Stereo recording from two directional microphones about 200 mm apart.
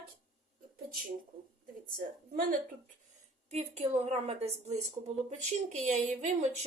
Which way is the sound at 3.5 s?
35° right (ahead or behind).